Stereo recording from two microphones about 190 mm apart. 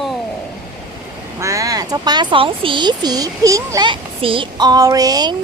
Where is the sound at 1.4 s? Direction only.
15° right (ahead or behind).